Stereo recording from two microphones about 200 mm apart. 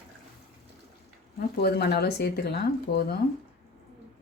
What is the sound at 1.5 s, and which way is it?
Speech, 55° left (ahead or behind).